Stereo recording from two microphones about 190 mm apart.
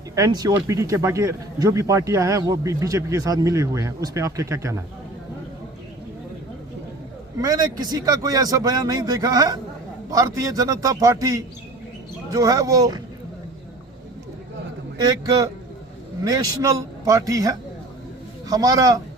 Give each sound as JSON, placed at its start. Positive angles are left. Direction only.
{"t": 0.2, "sound": "a man's voice", "side_deg": -20}
{"t": 7.3, "sound": "a man's voice", "side_deg": -20}
{"t": 15.0, "sound": "a man's voice", "side_deg": -20}